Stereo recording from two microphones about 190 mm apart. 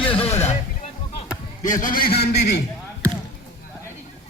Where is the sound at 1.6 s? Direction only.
45° left (ahead or behind).